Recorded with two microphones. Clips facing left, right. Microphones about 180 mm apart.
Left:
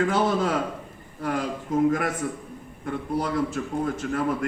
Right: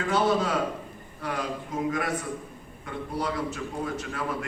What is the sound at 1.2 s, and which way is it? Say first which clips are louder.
A man's voice: left 4 dB; 50° left (ahead or behind).